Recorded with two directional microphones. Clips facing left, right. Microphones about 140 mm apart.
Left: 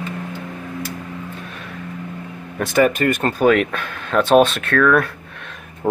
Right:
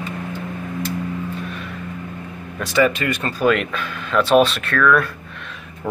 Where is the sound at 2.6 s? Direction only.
50° left (ahead or behind).